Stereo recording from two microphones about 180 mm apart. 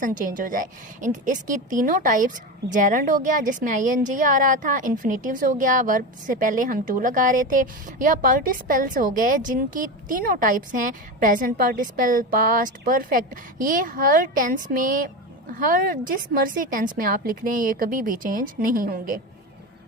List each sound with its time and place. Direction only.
0.0 s a woman's voice: 45° right (ahead or behind)